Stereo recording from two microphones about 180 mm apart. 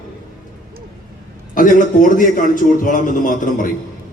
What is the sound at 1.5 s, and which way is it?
A man's voice, 45° left (ahead or behind).